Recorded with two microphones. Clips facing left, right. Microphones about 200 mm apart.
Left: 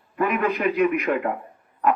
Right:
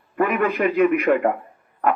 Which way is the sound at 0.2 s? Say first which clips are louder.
Right 3 dB; 55° right (ahead or behind).